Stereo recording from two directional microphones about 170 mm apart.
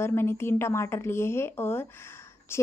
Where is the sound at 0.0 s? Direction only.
15° left (ahead or behind).